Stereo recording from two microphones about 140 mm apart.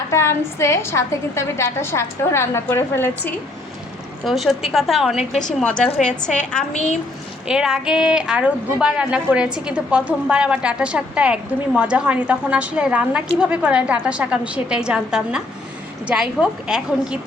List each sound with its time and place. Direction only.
0.1 s a woman's voice: 20° left (ahead or behind)
4.3 s a woman's voice: centre (ahead or behind)
6.7 s a woman's voice: 55° left (ahead or behind)
7.4 s a woman's voice: 5° right (ahead or behind)